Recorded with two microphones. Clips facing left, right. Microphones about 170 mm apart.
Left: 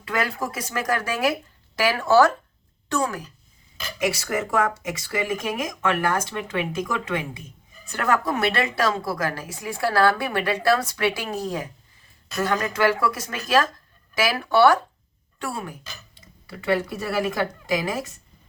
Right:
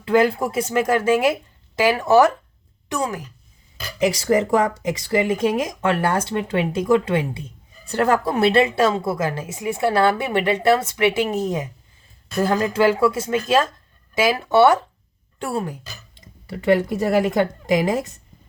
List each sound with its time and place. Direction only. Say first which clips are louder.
0.0 s a woman's voice: right 9 dB; 30° right (ahead or behind)
3.9 s a woman's voice: right 7 dB; 30° right (ahead or behind)
17.8 s speech: right 6 dB; 35° right (ahead or behind)